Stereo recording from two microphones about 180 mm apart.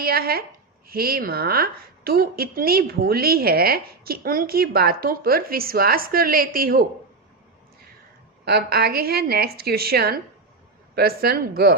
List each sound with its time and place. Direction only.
0.0 s a woman's voice: 60° right (ahead or behind)
8.4 s a woman's voice: 60° right (ahead or behind)